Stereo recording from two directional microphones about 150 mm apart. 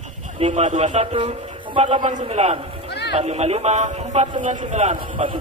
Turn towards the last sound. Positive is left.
turn(degrees=-50)  # may be behind; listen again after turning